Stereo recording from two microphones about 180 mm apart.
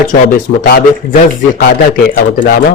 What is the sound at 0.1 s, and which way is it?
Speech, 55° left (ahead or behind).